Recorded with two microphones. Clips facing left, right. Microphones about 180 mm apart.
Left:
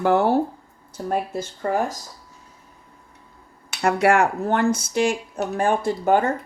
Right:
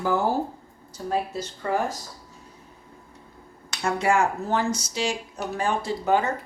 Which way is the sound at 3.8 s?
65° left (ahead or behind).